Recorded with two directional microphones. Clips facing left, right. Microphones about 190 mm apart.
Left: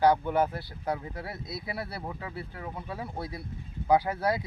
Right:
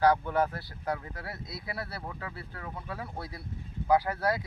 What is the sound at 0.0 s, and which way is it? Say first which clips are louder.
Speech: left 2 dB; 25° left (ahead or behind).